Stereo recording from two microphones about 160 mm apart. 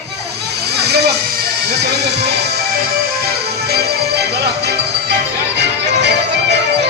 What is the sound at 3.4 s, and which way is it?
Music, 85° right.